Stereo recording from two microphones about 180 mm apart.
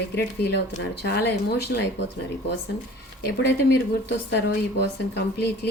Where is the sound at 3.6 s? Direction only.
75° left (ahead or behind).